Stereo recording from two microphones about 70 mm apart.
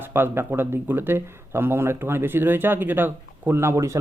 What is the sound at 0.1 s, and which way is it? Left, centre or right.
A man's voice, right.